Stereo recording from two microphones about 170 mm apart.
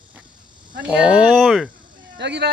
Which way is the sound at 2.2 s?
85° right.